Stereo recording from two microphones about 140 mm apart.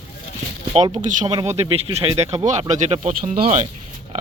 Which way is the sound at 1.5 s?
50° right (ahead or behind).